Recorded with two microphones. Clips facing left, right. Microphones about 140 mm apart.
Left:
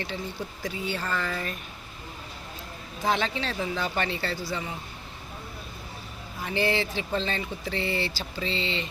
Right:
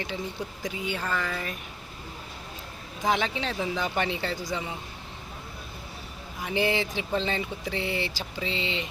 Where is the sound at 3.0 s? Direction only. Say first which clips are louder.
Even; 15° right (ahead or behind).